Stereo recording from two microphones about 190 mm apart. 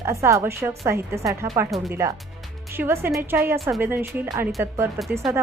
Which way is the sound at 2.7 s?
10° right (ahead or behind).